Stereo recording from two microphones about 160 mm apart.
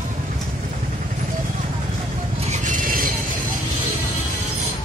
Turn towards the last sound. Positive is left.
turn(degrees=-60)  # may be behind; listen again after turning